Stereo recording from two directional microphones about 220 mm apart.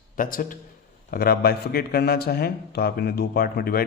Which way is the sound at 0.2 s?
40° left (ahead or behind).